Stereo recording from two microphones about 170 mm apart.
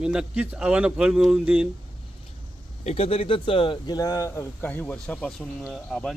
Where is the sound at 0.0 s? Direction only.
5° right (ahead or behind).